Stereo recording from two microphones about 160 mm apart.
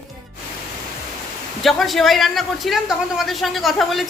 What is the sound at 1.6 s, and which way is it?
A man's voice, centre (ahead or behind).